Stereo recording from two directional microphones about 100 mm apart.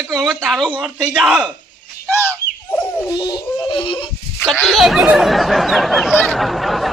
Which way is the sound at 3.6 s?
65° left (ahead or behind).